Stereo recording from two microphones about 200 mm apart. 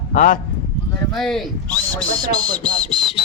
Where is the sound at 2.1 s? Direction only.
20° right (ahead or behind).